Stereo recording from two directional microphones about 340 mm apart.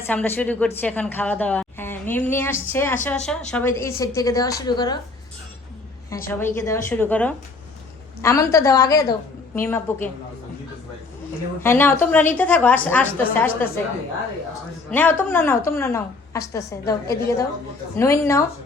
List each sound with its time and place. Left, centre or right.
0.0 s a woman's voice: centre
6.1 s a woman's voice: centre
11.6 s a woman's voice: centre
14.8 s a woman's voice: centre